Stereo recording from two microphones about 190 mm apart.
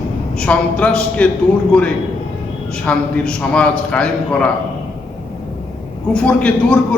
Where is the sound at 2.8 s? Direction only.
5° left (ahead or behind).